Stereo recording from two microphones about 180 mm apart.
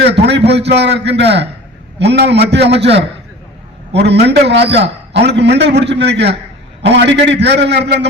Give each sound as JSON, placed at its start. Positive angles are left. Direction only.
{"t": 0.2, "sound": "a man's voice", "side_deg": -70}